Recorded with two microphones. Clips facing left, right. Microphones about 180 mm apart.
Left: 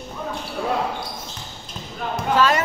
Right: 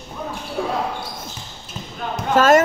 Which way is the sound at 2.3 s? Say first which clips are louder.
Right 6 dB; 45° right (ahead or behind).